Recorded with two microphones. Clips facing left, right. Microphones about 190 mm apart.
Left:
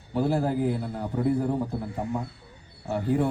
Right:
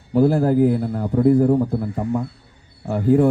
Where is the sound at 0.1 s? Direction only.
50° right (ahead or behind).